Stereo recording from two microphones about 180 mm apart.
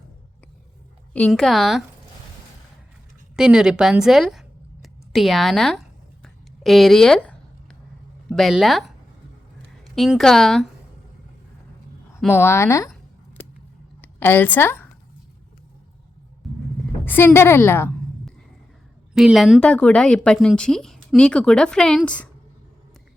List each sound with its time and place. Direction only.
1.1 s a woman's voice: 5° left (ahead or behind)
3.3 s speech: 5° right (ahead or behind)
6.2 s a sound: centre (ahead or behind)
8.3 s a woman's voice: centre (ahead or behind)
9.8 s a woman's voice: centre (ahead or behind)
12.3 s speech: 10° left (ahead or behind)
14.0 s speech: 10° left (ahead or behind)
17.1 s a woman's voice: 10° left (ahead or behind)
19.1 s a woman's voice: 5° right (ahead or behind)